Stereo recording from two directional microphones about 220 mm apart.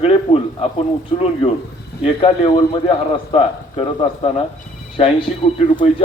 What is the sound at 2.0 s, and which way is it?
Speech, 25° left (ahead or behind).